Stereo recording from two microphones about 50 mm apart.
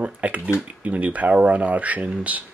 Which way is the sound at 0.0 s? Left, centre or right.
Right.